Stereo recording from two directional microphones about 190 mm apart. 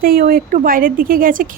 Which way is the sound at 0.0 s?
50° right (ahead or behind).